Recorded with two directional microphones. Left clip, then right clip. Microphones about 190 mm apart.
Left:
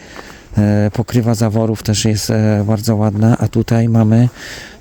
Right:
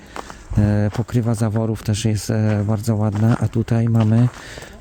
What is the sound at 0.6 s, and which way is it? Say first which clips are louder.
Speech: left 6 dB; 40° left (ahead or behind).